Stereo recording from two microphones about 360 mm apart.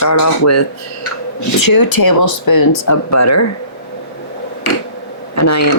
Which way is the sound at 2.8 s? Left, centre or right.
Left.